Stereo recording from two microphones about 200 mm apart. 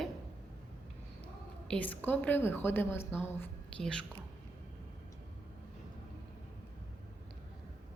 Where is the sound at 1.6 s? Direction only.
5° left (ahead or behind).